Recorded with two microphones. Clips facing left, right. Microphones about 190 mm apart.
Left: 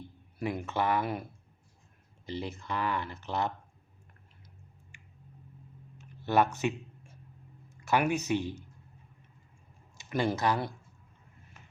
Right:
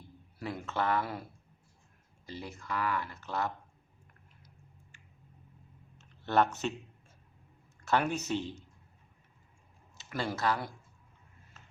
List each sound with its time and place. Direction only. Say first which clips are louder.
0.3 s speech: left 3 dB; 15° left (ahead or behind)
2.2 s speech: left 5 dB; 20° left (ahead or behind)
4.9 s a sound: left 4 dB; 15° left (ahead or behind)
7.8 s speech: left 2 dB; 10° left (ahead or behind)
10.0 s speech: left 4 dB; 20° left (ahead or behind)
11.6 s a sound: left 1 dB; 15° left (ahead or behind)